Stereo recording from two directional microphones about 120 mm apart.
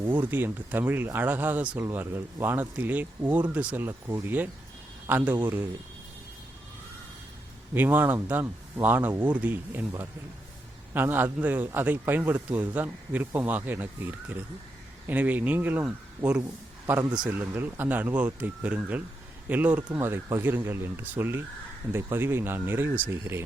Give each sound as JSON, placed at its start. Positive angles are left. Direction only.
{"t": 0.2, "sound": "a man's voice", "side_deg": -15}
{"t": 7.7, "sound": "a man's voice", "side_deg": -15}
{"t": 10.9, "sound": "a man's voice", "side_deg": -15}